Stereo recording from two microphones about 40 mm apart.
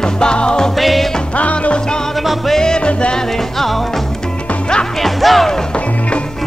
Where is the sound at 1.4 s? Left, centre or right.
Left.